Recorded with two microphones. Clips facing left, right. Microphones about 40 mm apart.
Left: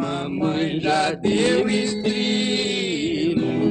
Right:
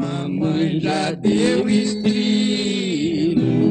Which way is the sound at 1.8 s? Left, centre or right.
Centre.